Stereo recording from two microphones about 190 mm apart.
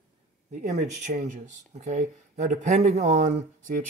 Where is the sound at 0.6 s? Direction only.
40° right (ahead or behind).